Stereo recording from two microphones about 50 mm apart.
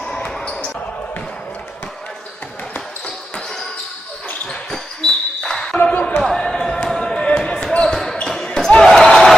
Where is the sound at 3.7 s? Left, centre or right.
Left.